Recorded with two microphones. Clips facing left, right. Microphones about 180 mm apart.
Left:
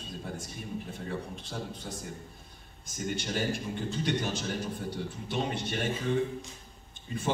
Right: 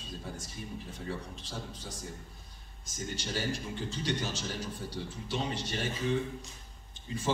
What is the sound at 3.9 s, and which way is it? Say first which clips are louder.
A man's voice: left 4 dB; 55° left (ahead or behind).